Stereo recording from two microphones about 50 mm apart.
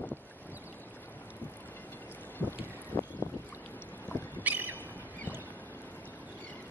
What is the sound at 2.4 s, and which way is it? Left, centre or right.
Boat, left.